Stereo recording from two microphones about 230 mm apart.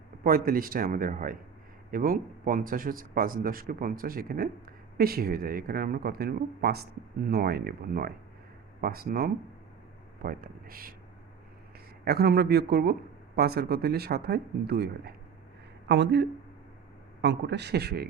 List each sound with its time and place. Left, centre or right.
0.3 s a man's voice: right
12.0 s speech: right